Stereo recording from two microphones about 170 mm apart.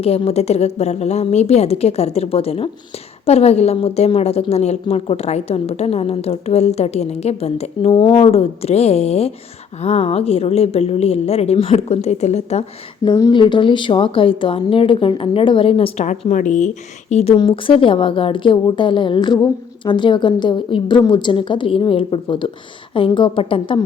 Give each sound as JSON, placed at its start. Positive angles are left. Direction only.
{"t": 0.0, "sound": "a woman's voice", "side_deg": 35}
{"t": 13.1, "sound": "a woman's voice", "side_deg": 25}